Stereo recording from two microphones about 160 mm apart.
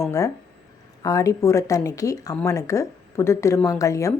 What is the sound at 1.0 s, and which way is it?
A woman's voice, 20° left (ahead or behind).